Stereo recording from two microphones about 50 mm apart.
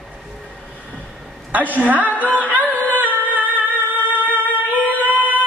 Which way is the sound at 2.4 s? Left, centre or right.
Left.